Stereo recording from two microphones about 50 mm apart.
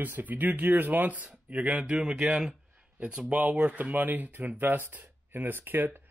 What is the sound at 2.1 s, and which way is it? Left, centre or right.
Speech, centre.